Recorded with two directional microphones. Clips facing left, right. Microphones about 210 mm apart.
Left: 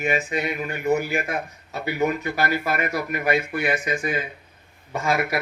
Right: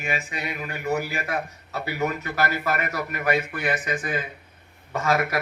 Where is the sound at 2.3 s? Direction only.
15° left (ahead or behind).